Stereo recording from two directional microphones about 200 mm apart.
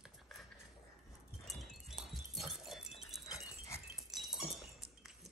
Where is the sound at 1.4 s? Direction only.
Centre (ahead or behind).